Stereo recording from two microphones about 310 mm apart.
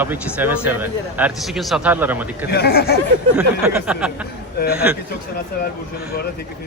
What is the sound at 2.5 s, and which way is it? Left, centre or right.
Speech, left.